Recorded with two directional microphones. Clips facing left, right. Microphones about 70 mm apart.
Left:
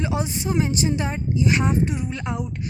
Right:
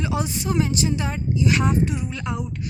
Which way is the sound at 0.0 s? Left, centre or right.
Left.